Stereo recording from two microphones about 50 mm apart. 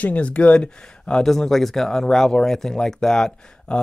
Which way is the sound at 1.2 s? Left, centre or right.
Centre.